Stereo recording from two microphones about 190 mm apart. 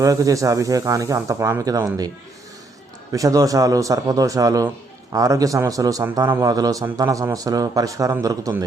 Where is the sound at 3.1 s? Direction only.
20° right (ahead or behind).